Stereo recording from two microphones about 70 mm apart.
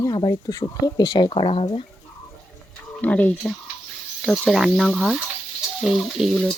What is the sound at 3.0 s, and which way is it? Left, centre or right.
Speech, left.